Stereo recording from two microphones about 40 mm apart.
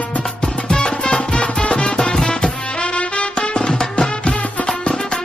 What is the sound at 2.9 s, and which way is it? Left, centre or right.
Music, left.